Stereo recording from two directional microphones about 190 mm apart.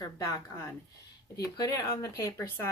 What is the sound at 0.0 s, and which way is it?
A woman's voice, 15° left (ahead or behind).